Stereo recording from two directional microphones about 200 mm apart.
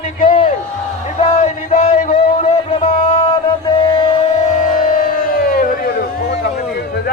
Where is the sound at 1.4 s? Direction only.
35° left (ahead or behind).